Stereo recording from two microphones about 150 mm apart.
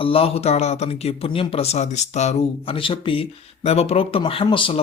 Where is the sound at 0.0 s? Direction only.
40° left (ahead or behind).